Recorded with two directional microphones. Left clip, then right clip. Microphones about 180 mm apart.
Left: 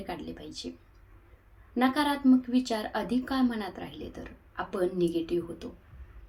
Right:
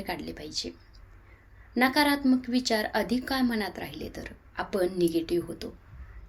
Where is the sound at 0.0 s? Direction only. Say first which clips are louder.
Right 3 dB; 15° right (ahead or behind).